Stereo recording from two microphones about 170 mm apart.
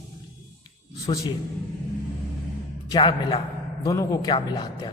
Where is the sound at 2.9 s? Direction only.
30° left (ahead or behind).